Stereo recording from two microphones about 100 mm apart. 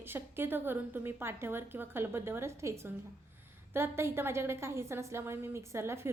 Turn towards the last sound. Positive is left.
turn(degrees=-25)  # may be behind; listen again after turning